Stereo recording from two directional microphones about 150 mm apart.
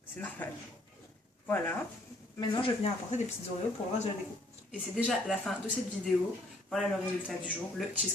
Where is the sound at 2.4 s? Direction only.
25° left (ahead or behind).